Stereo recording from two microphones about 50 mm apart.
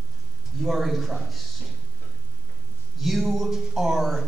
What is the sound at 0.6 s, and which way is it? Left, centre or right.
Speech, centre.